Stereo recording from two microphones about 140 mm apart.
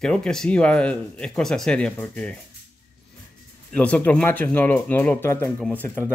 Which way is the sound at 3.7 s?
10° left (ahead or behind).